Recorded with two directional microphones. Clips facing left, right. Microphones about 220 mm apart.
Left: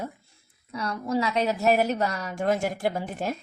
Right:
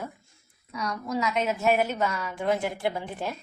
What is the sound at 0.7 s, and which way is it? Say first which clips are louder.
A woman's voice: left 3 dB; 30° left (ahead or behind).